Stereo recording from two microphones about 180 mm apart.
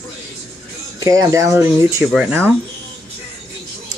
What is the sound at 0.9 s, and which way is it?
Speech, 20° right (ahead or behind).